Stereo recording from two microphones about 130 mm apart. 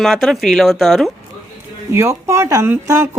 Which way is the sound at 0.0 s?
Centre (ahead or behind).